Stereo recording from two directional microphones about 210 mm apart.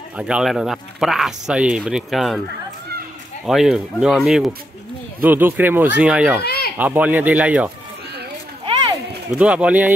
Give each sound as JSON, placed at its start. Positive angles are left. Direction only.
{"t": 0.2, "sound": "speech", "side_deg": -5}
{"t": 3.4, "sound": "speech", "side_deg": 0}
{"t": 6.4, "sound": "a sound", "side_deg": 50}
{"t": 6.8, "sound": "speech", "side_deg": -10}
{"t": 9.4, "sound": "speech", "side_deg": -5}